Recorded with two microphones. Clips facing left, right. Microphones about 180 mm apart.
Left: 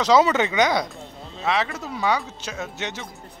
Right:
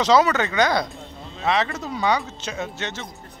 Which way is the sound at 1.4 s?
5° left (ahead or behind).